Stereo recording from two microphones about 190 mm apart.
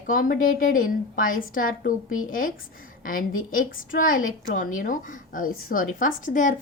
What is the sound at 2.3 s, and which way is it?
Speech, 45° left (ahead or behind).